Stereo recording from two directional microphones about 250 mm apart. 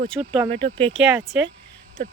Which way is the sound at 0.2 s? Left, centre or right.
Centre.